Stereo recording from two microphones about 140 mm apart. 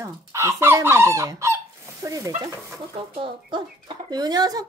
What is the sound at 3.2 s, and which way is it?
Speech, 35° right (ahead or behind).